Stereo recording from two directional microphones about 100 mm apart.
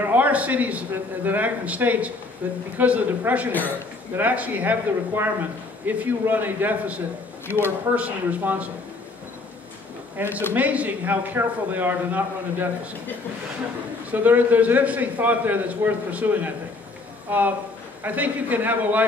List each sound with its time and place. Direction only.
0.0 s a man's voice: 15° right (ahead or behind)
7.4 s speech: 25° left (ahead or behind)
7.9 s a man's voice: 15° right (ahead or behind)
10.2 s a man's voice: 20° right (ahead or behind)
14.1 s a man's voice: 15° right (ahead or behind)